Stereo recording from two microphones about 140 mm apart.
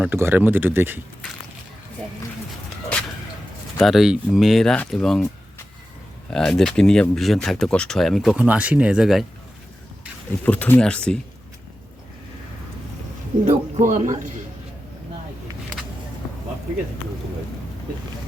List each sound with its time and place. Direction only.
0.0 s speech: 15° right (ahead or behind)
3.8 s speech: centre (ahead or behind)
6.3 s speech: 5° left (ahead or behind)
8.4 s speech: 10° right (ahead or behind)
10.4 s speech: 10° left (ahead or behind)
13.4 s speech: 65° right (ahead or behind)